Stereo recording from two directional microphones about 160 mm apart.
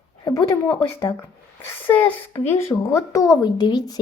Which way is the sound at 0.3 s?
20° left (ahead or behind).